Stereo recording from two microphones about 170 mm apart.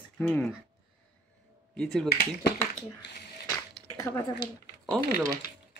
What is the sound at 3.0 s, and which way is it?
Speech, 90° left.